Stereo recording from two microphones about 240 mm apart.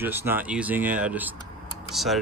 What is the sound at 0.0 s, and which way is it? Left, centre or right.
Speech, centre.